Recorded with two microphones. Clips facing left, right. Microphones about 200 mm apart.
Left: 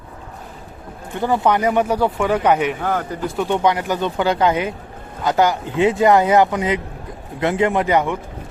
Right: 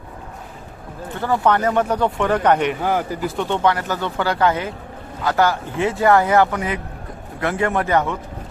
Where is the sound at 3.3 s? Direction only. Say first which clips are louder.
Left 2 dB; 15° left (ahead or behind).